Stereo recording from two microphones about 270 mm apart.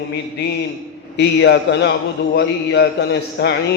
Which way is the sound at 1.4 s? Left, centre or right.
Left.